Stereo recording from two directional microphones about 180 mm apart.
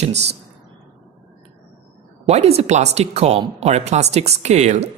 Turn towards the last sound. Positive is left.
turn(degrees=-40)  # may be behind; listen again after turning